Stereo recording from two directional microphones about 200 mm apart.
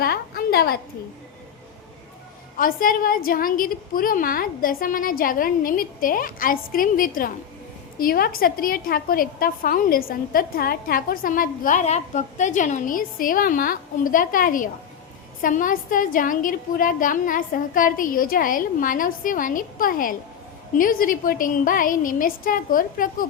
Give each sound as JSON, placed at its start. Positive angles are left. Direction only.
{"t": 0.0, "sound": "a woman's voice", "side_deg": 50}
{"t": 2.6, "sound": "a woman's voice", "side_deg": 45}